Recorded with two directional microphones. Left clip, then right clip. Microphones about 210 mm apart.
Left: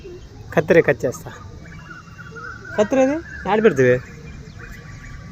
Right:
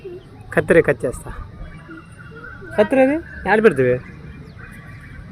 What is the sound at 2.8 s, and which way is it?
Speech, 10° right (ahead or behind).